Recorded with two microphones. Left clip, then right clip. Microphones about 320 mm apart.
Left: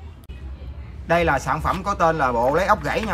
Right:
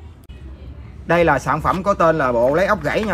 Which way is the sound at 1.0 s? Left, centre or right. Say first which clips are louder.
Right 4 dB; centre.